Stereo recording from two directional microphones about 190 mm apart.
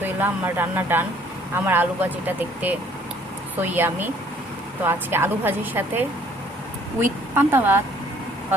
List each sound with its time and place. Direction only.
0.0 s speech: 10° right (ahead or behind)